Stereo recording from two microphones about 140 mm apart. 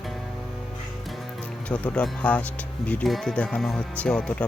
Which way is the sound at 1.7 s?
10° left (ahead or behind).